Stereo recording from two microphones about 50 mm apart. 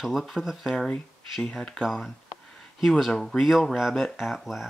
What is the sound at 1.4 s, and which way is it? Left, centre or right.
Speech, centre.